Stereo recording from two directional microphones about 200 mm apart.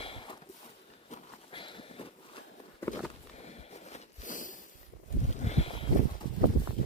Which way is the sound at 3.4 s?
35° left (ahead or behind).